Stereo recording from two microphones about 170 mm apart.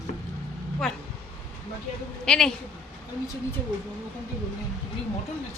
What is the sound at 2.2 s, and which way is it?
Speech, 5° left (ahead or behind).